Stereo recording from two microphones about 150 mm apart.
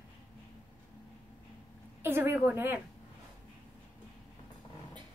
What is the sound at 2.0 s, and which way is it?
Speech, 15° right (ahead or behind).